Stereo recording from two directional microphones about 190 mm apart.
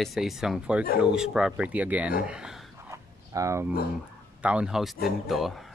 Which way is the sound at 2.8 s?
15° right (ahead or behind).